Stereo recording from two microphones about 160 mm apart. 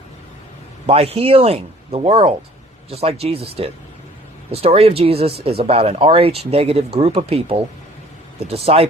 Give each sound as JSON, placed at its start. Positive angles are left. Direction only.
{"t": 0.9, "sound": "speech", "side_deg": -40}